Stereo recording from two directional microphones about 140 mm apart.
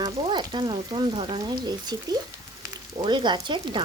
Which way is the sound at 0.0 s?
35° right (ahead or behind).